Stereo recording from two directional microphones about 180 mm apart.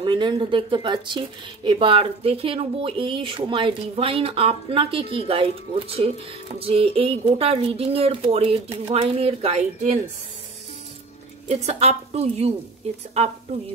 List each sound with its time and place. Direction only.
0.0 s speech: 25° right (ahead or behind)
11.4 s speech: 35° right (ahead or behind)